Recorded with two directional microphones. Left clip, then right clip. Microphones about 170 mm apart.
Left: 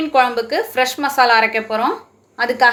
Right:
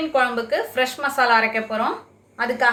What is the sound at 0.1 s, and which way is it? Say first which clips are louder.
A woman's voice: left 5 dB; 55° left (ahead or behind).